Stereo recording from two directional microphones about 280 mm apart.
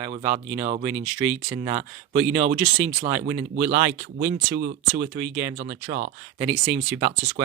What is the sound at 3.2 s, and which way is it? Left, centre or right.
Speech, centre.